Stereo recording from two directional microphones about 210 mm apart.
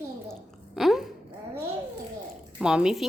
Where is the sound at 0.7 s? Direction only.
Centre (ahead or behind).